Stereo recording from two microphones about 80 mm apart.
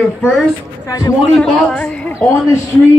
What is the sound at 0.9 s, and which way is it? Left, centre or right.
Speech, left.